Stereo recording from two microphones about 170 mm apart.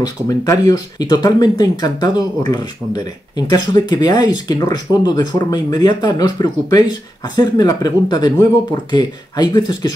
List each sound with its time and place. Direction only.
0.0 s speech: 25° left (ahead or behind)